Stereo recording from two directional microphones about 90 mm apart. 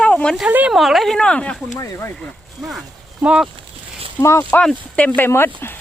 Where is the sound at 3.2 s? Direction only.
10° right (ahead or behind).